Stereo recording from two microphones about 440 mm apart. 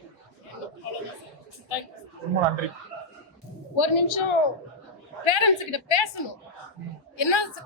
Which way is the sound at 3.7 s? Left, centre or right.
Left.